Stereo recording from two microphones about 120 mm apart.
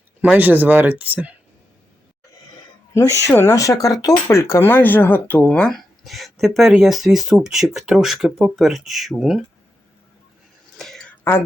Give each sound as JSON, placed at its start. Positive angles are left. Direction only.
{"t": 0.2, "sound": "speech", "side_deg": -15}
{"t": 2.9, "sound": "speech", "side_deg": 25}
{"t": 10.8, "sound": "a sound", "side_deg": 0}
{"t": 11.2, "sound": "speech", "side_deg": 20}